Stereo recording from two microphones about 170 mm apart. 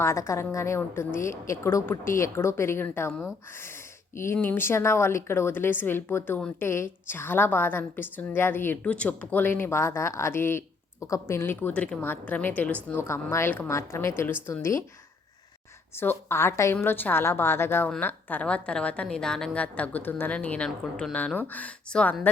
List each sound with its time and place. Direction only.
0.0 s a woman's voice: 15° left (ahead or behind)
16.0 s a woman's voice: 15° left (ahead or behind)